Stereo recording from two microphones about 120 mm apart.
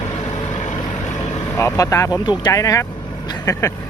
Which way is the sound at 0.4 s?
85° left.